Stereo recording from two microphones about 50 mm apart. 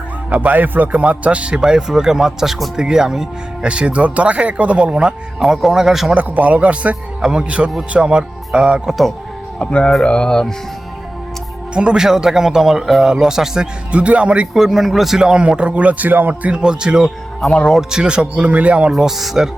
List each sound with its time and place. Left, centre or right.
0.3 s a man's voice: right; by 3.7 s centre
3.7 s a man's voice: right; by 6.1 s centre
6.1 s a man's voice: right
7.2 s a man's voice: centre
8.9 s speech: centre
9.6 s speech: centre
10.0 s music: centre
11.7 s a man's voice: centre
13.9 s a man's voice: right
14.5 s a man's voice: centre; by 16.5 s right
16.5 s a man's voice: centre
17.4 s speech: centre
17.7 s a man's voice: centre
18.9 s speech: centre